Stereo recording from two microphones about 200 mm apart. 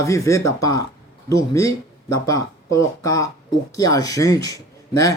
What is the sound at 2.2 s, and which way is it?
Speech, 15° left (ahead or behind).